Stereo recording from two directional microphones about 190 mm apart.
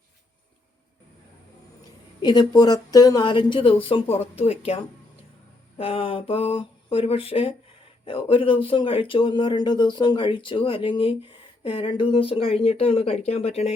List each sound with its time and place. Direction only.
2.2 s speech: 20° left (ahead or behind)